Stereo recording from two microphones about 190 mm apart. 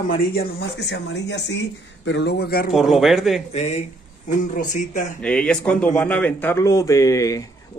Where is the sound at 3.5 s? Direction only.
35° left (ahead or behind).